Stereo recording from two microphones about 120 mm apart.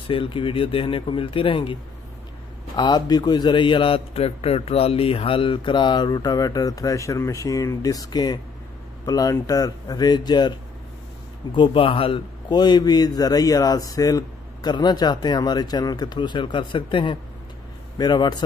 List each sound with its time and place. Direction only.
0.1 s a man's voice: 45° left (ahead or behind)
11.5 s a man's voice: 45° left (ahead or behind)